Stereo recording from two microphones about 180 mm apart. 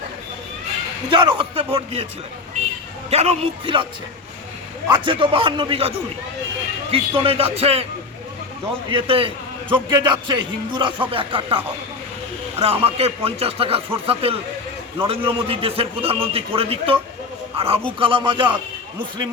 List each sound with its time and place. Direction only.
1.1 s a man's voice: 30° right (ahead or behind)
3.1 s a man's voice: 35° right (ahead or behind)
4.9 s a man's voice: 30° right (ahead or behind)
6.9 s a man's voice: 30° right (ahead or behind)
8.9 s a man's voice: 30° right (ahead or behind)
12.6 s a man's voice: 35° right (ahead or behind)